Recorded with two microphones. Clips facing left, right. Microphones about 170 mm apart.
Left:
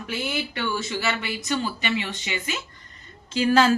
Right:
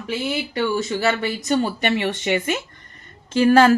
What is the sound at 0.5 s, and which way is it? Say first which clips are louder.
Speech: right 6 dB; 35° right (ahead or behind).